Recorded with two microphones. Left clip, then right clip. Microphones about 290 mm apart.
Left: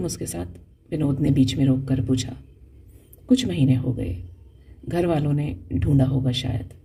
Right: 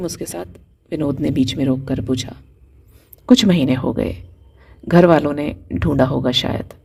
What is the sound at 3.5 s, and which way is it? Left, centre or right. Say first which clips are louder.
Speech: right 6 dB; right.